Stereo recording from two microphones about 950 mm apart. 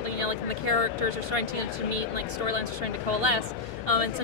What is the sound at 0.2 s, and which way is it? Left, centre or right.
Speech, right.